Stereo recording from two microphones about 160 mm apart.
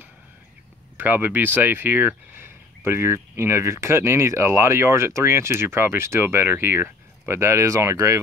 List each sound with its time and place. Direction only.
0.9 s speech: 10° right (ahead or behind)